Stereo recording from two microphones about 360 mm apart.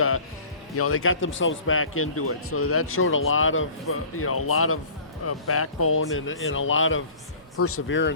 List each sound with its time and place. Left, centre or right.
0.8 s speech: left